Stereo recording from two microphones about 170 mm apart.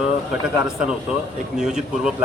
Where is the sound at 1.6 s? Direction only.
5° right (ahead or behind).